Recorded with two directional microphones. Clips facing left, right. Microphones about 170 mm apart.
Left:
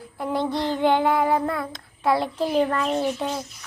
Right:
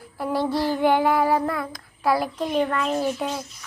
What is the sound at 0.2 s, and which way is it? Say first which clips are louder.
Child singing: right 1 dB; 20° left (ahead or behind).